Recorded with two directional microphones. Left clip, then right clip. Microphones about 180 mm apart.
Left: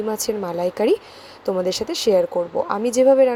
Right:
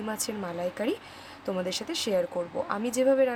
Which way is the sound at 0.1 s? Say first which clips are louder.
Left 10 dB; 15° left (ahead or behind).